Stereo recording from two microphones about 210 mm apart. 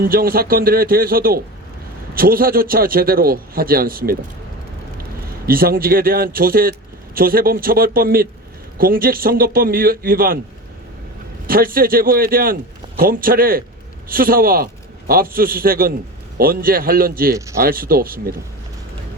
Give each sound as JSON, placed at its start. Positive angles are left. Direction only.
{"t": 0.0, "sound": "a man's voice", "side_deg": -45}
{"t": 5.5, "sound": "a man's voice", "side_deg": -45}
{"t": 11.4, "sound": "a man's voice", "side_deg": -45}
{"t": 17.3, "sound": "speech", "side_deg": -15}
{"t": 17.6, "sound": "a man's voice", "side_deg": -45}